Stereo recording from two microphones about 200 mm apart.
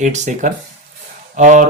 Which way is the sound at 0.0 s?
40° right (ahead or behind).